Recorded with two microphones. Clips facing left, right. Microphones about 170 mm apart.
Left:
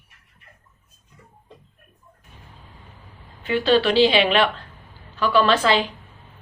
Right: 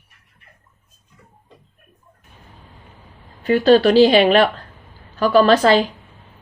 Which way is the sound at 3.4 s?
45° right (ahead or behind).